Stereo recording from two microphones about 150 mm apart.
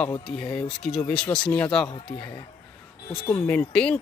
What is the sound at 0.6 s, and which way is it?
Speech, 5° left (ahead or behind).